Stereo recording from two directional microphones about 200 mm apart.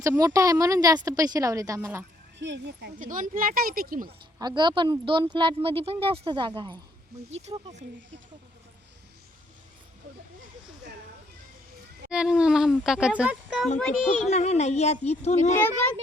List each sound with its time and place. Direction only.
0.0 s speech: 10° right (ahead or behind)
2.4 s speech: 60° right (ahead or behind)
3.0 s speech: 40° right (ahead or behind)
4.4 s speech: 20° right (ahead or behind)
12.1 s speech: 5° right (ahead or behind)
14.3 s speech: 35° left (ahead or behind)
15.5 s a child's voice: 10° left (ahead or behind)